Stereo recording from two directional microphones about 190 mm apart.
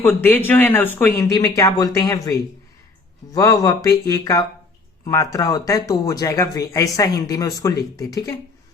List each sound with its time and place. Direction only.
0.0 s speech: 10° left (ahead or behind)